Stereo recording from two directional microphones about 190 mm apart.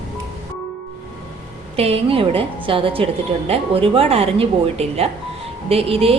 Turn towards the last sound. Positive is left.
turn(degrees=-30)  # may be behind; listen again after turning